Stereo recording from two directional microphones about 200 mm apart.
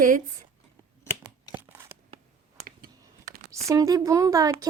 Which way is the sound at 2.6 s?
45° right (ahead or behind).